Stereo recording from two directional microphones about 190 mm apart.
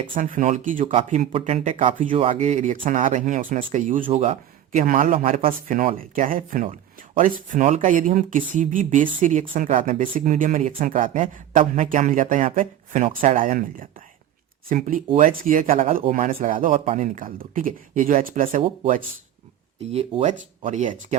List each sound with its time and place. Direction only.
0.2 s speech: 40° right (ahead or behind)
19.9 s speech: 35° right (ahead or behind)